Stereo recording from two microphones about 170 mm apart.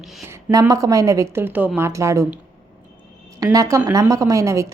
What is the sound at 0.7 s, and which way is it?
A woman's voice, 20° right (ahead or behind).